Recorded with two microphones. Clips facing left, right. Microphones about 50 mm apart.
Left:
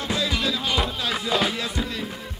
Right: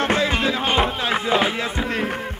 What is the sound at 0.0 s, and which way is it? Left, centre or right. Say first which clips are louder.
Speech: right 6 dB; right.